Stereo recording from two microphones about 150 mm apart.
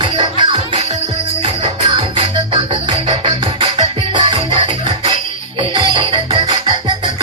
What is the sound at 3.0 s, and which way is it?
Music, 40° right (ahead or behind).